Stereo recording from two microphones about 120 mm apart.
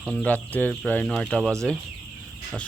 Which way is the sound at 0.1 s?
10° left (ahead or behind).